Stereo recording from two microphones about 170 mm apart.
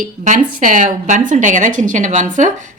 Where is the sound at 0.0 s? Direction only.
50° right (ahead or behind).